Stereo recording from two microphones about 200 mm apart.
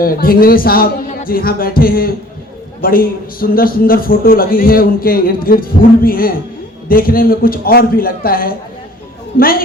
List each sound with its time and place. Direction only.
0.0 s a man's voice: 45° left (ahead or behind)